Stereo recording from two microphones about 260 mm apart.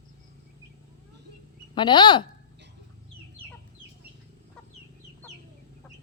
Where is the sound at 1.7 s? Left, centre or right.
Centre.